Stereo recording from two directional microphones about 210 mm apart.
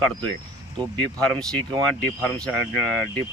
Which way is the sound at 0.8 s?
5° left (ahead or behind).